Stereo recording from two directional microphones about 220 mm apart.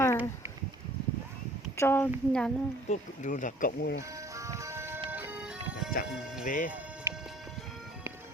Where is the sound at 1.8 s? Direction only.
10° left (ahead or behind).